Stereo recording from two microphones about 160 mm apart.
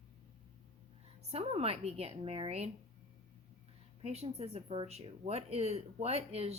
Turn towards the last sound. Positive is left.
turn(degrees=-40)  # may be behind; listen again after turning